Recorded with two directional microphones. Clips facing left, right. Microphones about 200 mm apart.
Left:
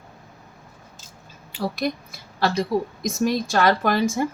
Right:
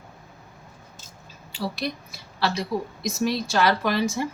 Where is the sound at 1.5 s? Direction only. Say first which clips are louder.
Left 4 dB; 55° left (ahead or behind).